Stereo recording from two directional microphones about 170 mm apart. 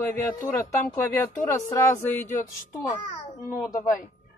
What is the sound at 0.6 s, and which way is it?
Speech, 15° left (ahead or behind).